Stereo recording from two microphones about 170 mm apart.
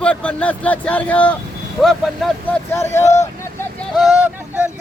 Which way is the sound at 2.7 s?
15° left (ahead or behind).